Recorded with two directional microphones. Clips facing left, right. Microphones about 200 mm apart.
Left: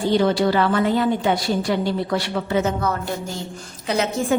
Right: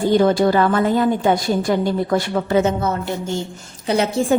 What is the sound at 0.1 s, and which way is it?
A woman's voice, 50° right (ahead or behind).